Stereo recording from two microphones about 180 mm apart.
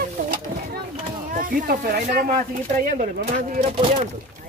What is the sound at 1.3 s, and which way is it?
Speech, 50° right (ahead or behind).